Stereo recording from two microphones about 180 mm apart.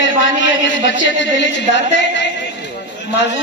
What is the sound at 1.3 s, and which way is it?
Singing, 85° left.